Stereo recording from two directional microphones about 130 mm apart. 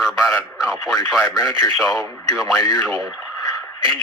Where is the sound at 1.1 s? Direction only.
Centre (ahead or behind).